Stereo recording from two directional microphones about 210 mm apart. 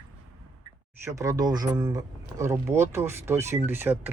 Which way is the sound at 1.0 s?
15° right (ahead or behind).